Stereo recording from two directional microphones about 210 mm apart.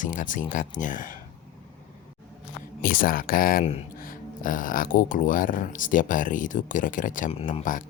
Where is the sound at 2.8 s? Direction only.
45° left (ahead or behind).